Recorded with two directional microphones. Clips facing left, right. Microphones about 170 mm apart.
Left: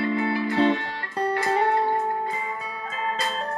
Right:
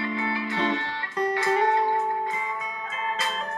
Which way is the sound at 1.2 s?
30° left (ahead or behind).